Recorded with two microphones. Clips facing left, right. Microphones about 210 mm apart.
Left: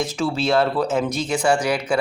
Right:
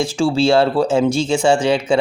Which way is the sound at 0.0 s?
30° right (ahead or behind).